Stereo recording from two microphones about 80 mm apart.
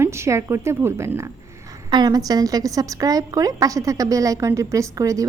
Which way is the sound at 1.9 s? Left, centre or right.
Right.